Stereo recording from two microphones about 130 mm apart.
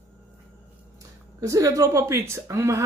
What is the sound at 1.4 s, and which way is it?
A woman's voice, 25° right (ahead or behind).